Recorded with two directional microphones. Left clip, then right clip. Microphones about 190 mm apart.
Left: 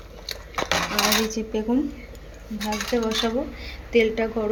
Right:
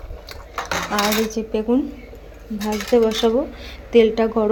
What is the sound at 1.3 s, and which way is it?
Speech, 20° right (ahead or behind).